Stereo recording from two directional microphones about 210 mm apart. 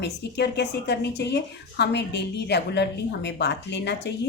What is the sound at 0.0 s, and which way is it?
Speech, 55° left (ahead or behind).